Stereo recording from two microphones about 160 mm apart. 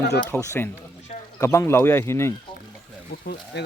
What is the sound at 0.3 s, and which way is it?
Speech, 15° left (ahead or behind).